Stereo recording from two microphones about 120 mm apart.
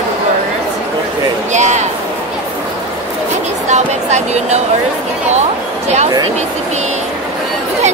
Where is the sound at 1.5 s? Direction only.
80° right.